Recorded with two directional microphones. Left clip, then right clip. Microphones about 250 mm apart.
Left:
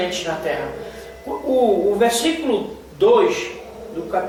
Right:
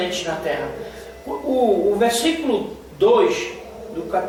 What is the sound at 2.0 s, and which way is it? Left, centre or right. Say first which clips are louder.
Speech: left 1 dB; centre.